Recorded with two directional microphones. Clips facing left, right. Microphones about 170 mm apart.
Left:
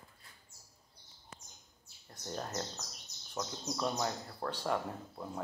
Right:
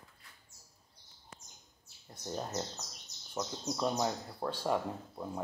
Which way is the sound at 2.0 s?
15° right (ahead or behind).